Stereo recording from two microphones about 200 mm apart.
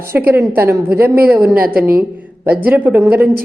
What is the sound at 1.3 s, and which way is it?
Speech, 50° right (ahead or behind).